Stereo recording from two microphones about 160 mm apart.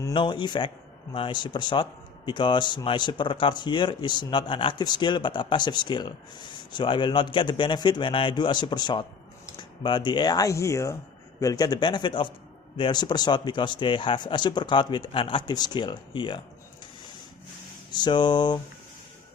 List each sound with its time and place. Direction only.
0.1 s speech: 30° left (ahead or behind)
17.9 s speech: 30° left (ahead or behind)